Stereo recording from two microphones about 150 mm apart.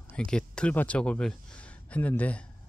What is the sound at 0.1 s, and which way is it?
Speech, 10° left (ahead or behind).